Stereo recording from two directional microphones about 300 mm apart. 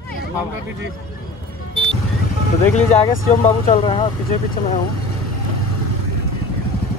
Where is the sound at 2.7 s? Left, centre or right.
Left.